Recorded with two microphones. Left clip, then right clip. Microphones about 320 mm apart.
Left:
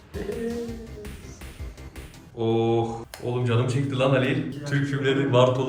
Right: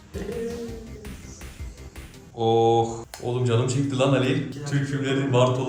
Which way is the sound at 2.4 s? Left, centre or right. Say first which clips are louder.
Right 4 dB; centre.